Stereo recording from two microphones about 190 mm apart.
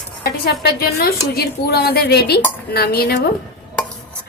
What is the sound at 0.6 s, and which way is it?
A woman's voice, 55° left (ahead or behind).